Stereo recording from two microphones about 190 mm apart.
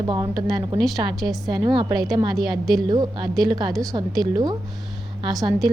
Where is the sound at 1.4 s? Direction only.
20° right (ahead or behind).